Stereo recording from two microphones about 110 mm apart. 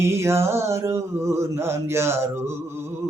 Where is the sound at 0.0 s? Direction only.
25° right (ahead or behind).